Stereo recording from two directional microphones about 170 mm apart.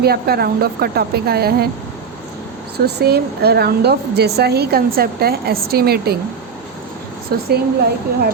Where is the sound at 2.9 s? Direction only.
70° right (ahead or behind).